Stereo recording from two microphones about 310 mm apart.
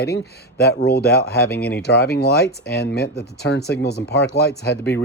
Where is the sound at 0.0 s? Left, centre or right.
Left.